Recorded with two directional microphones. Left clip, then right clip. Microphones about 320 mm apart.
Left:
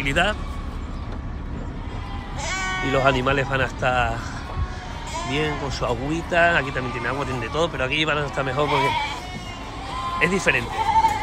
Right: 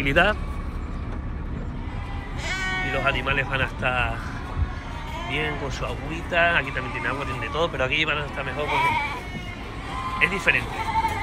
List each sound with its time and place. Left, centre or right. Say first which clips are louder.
0.0 s speech: right 1 dB; centre
2.4 s bleat: left 1 dB; left
3.0 s speech: left 5 dB; centre
5.3 s speech: left 2 dB; centre
8.6 s speech: right 2 dB; left
10.1 s speech: left 1 dB; centre